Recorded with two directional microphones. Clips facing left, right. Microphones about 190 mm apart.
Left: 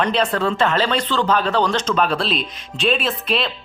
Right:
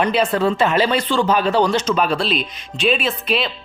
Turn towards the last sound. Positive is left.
turn(degrees=0)  # may be behind; listen again after turning